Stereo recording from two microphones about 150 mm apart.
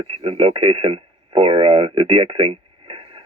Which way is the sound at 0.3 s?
40° right (ahead or behind).